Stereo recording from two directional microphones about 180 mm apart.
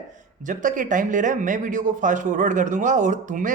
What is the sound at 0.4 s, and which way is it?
Speech, 45° right (ahead or behind).